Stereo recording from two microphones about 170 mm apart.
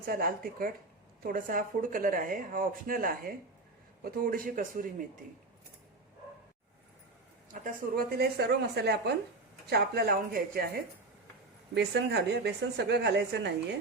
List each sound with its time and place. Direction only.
0.0 s speech: 60° right (ahead or behind)
7.5 s speech: 55° right (ahead or behind); by 9.1 s 80° right
9.6 s speech: 70° right (ahead or behind)
11.7 s a woman's voice: 80° right